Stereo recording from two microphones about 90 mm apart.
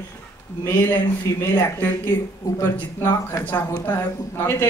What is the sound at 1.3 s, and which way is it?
Speech, 35° left (ahead or behind).